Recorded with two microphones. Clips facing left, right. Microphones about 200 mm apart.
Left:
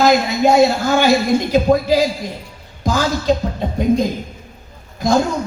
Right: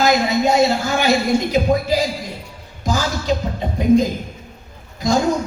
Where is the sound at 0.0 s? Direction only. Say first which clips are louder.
Left 2 dB; 60° left (ahead or behind).